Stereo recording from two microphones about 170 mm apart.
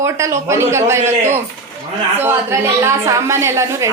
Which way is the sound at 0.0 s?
15° right (ahead or behind).